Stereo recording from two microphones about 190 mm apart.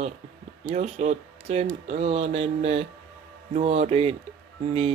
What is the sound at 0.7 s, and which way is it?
Speech, 40° right (ahead or behind).